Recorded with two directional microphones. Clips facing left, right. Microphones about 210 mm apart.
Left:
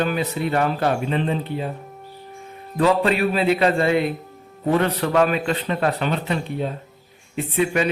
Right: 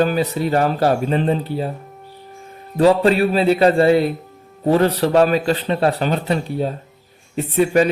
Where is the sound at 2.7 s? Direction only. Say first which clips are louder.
Right 5 dB; 35° right (ahead or behind).